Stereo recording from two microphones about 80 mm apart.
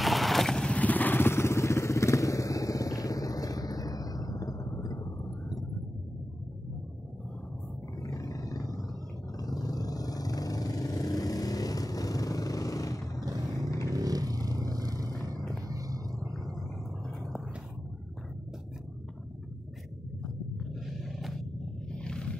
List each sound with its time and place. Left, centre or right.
0.0 s vehicle: centre; by 4.8 s left
8.0 s roar: left
9.4 s vehicle: left
13.9 s vehicle: right
20.5 s roaring cats: centre
21.9 s roaring cats: centre